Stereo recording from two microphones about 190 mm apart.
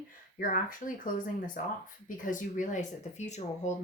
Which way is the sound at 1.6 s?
45° left (ahead or behind).